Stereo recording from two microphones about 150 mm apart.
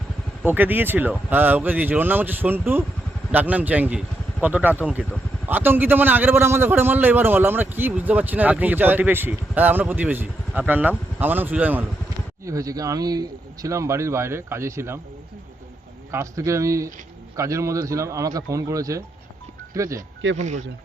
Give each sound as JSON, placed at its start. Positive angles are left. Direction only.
{"t": 0.4, "sound": "a man's voice", "side_deg": -10}
{"t": 12.5, "sound": "a man's voice", "side_deg": -20}
{"t": 16.1, "sound": "a man's voice", "side_deg": -20}
{"t": 20.0, "sound": "speech", "side_deg": -50}